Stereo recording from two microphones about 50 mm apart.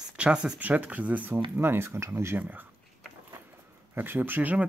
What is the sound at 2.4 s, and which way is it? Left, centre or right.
Speech, right.